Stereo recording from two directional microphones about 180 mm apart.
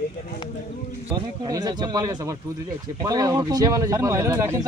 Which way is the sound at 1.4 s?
20° right (ahead or behind).